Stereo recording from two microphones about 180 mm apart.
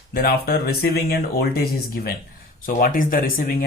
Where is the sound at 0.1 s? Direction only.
55° left (ahead or behind).